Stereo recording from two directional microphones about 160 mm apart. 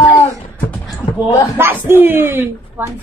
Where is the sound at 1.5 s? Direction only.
15° right (ahead or behind).